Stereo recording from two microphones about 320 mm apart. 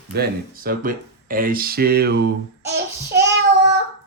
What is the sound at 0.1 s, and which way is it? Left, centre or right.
Speech, right.